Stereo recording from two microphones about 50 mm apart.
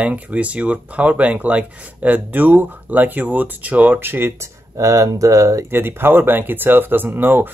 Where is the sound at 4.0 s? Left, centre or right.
Right.